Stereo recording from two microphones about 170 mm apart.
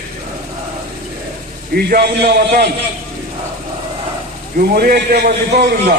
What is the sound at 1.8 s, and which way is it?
Speech, 70° right (ahead or behind).